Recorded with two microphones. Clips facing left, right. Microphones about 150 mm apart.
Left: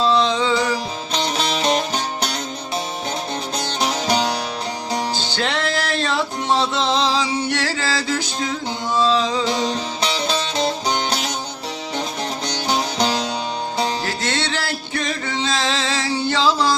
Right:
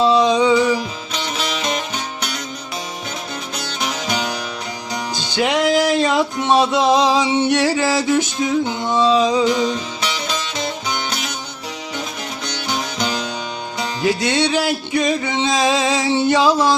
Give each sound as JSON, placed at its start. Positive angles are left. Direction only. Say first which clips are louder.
{"t": 0.0, "sound": "music", "louder": "right 4 dB", "side_deg": -15}
{"t": 1.1, "sound": "music", "louder": "left 3 dB", "side_deg": 35}
{"t": 3.6, "sound": "music", "louder": "left 2 dB", "side_deg": 35}
{"t": 5.3, "sound": "music", "louder": "right 10 dB", "side_deg": -15}
{"t": 9.5, "sound": "music", "louder": "right 3 dB", "side_deg": 35}
{"t": 12.5, "sound": "music", "louder": "left 2 dB", "side_deg": 35}
{"t": 14.0, "sound": "music", "louder": "right 6 dB", "side_deg": -15}